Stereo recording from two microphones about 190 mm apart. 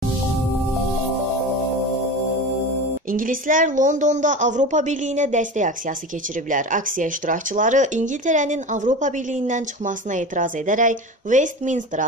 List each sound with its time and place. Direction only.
3.1 s speech: 45° right (ahead or behind)